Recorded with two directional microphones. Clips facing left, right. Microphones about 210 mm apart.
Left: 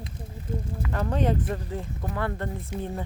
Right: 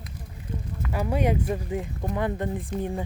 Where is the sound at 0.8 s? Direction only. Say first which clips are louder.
Right 2 dB; 10° right (ahead or behind).